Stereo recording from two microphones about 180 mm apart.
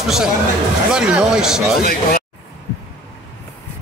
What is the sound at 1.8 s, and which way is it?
Speech, 55° left (ahead or behind).